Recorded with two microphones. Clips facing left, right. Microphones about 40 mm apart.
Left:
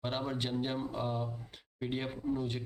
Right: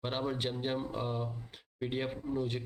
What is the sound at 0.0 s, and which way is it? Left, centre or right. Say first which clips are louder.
Speech: right 1 dB; centre.